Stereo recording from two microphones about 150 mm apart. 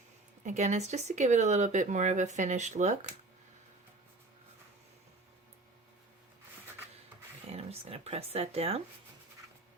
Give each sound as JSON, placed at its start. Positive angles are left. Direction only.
{"t": 0.4, "sound": "speech", "side_deg": -55}
{"t": 7.5, "sound": "speech", "side_deg": -40}